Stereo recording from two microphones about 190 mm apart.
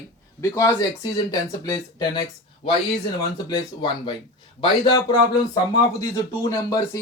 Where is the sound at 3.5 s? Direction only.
25° left (ahead or behind).